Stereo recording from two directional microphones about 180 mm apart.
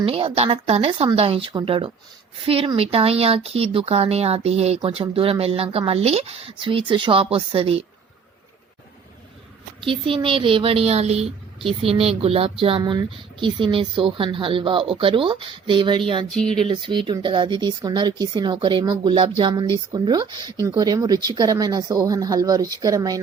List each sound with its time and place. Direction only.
0.0 s speech: 30° right (ahead or behind)
9.8 s speech: 30° right (ahead or behind)